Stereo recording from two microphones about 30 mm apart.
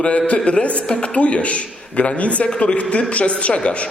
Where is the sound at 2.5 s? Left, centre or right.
Left.